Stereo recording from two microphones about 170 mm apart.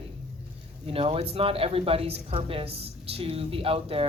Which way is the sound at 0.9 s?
35° right (ahead or behind).